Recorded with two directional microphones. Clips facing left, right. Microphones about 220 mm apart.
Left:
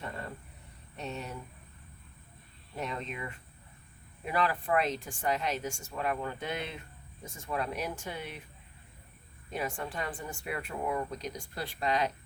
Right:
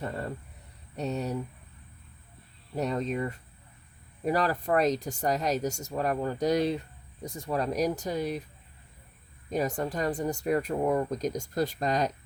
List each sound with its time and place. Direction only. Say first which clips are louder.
0.9 s speech: right 8 dB; 40° right (ahead or behind)
2.7 s speech: right 9 dB; 40° right (ahead or behind)
9.5 s speech: right 7 dB; 40° right (ahead or behind)